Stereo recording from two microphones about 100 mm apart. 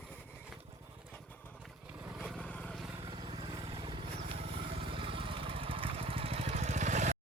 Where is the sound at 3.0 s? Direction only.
55° right (ahead or behind); by 6.6 s 75° right (ahead or behind).